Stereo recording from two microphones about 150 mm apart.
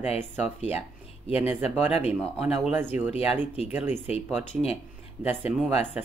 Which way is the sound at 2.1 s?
5° right (ahead or behind).